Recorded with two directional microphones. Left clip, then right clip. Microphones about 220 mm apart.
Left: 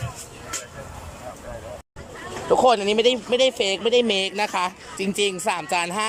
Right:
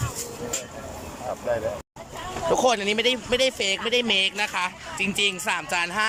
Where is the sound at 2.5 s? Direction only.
10° left (ahead or behind).